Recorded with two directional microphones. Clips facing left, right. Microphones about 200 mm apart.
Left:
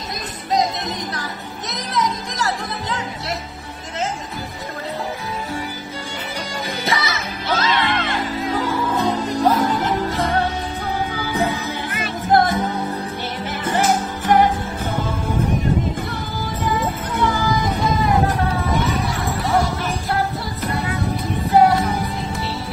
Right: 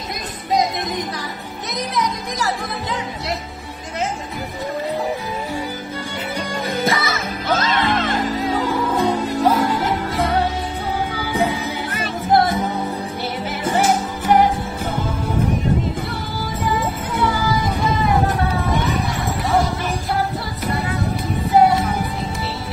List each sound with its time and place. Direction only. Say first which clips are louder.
6.7 s music: right 3 dB; 50° right (ahead or behind)
8.9 s music: right 1 dB; 10° right (ahead or behind)
12.3 s music: even; 10° right (ahead or behind)
13.7 s music: right 1 dB; 10° right (ahead or behind)
17.7 s music: even; centre (ahead or behind)
21.5 s music: even; centre (ahead or behind)